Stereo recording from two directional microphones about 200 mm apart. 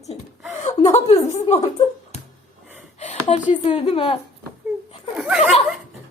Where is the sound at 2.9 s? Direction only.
35° left (ahead or behind).